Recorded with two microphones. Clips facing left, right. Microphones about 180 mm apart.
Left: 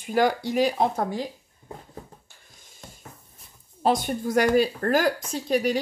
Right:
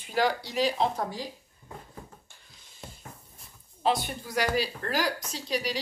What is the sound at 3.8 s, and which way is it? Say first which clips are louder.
Speech: left 5 dB; 45° left (ahead or behind).